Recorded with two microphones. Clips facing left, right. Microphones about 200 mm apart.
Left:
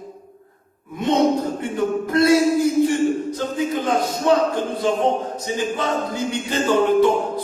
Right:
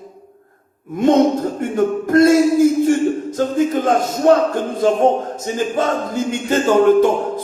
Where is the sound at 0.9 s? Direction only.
45° right (ahead or behind).